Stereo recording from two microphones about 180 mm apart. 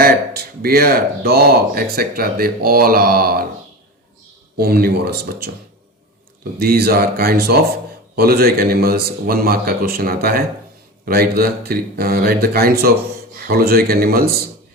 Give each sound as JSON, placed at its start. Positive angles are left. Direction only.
{"t": 0.0, "sound": "speech", "side_deg": -60}
{"t": 4.5, "sound": "speech", "side_deg": -60}
{"t": 6.6, "sound": "speech", "side_deg": -60}